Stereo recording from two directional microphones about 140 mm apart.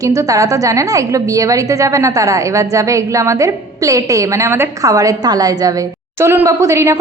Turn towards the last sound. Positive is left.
turn(degrees=-20)  # may be behind; listen again after turning